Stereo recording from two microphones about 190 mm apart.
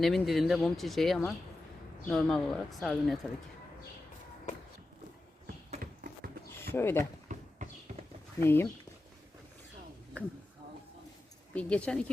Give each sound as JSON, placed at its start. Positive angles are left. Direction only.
{"t": 0.0, "sound": "speech", "side_deg": 0}
{"t": 5.7, "sound": "a sound", "side_deg": -50}
{"t": 6.7, "sound": "speech", "side_deg": 10}
{"t": 7.3, "sound": "a sound", "side_deg": -40}
{"t": 8.4, "sound": "speech", "side_deg": 10}
{"t": 10.2, "sound": "speech", "side_deg": 5}
{"t": 11.5, "sound": "speech", "side_deg": 5}